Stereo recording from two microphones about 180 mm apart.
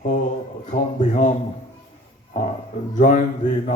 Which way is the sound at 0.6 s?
45° left (ahead or behind).